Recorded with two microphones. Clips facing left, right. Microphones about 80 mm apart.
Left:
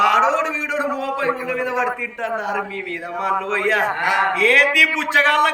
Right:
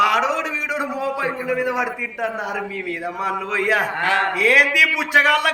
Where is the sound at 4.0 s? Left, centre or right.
Centre.